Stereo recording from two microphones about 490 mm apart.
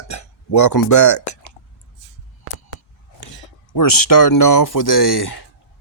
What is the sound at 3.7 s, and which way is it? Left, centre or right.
Speech, left.